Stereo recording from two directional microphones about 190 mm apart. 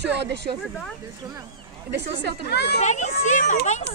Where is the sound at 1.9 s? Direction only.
65° right (ahead or behind).